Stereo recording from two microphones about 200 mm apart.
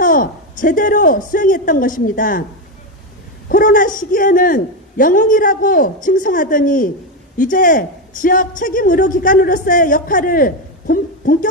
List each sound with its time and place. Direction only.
0.0 s a man's voice: 40° left (ahead or behind)
3.4 s a man's voice: 45° left (ahead or behind)